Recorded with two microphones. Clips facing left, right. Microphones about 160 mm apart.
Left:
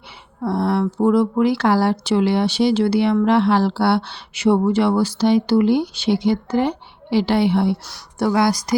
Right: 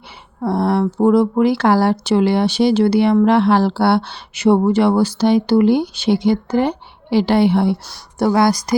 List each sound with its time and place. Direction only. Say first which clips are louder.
0.4 s speech: right 3 dB; 45° right (ahead or behind)
7.9 s speech: right 3 dB; 30° right (ahead or behind)
8.3 s speech: right 3 dB; 45° right (ahead or behind)